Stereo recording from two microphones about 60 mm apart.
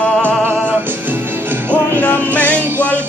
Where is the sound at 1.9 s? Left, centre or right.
Left.